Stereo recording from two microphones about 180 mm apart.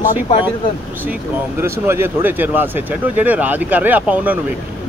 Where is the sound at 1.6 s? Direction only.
10° right (ahead or behind).